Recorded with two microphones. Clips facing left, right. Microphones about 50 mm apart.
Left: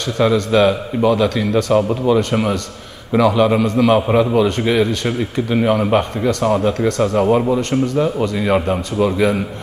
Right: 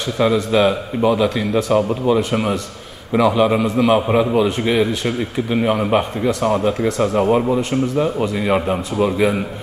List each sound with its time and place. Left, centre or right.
0.2 s a man's voice: centre